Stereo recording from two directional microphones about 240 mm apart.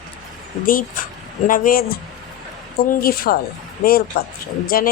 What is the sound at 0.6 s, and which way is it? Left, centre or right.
A woman's voice, left.